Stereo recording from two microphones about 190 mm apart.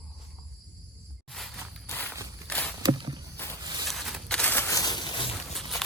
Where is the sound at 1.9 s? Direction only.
10° left (ahead or behind).